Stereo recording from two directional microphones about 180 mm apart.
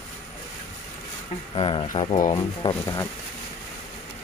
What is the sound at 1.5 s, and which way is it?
Speech, 30° left (ahead or behind).